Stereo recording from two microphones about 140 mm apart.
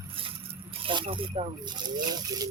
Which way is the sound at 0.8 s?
40° right (ahead or behind).